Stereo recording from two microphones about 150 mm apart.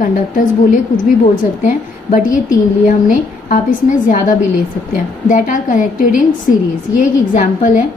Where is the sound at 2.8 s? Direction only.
60° left (ahead or behind).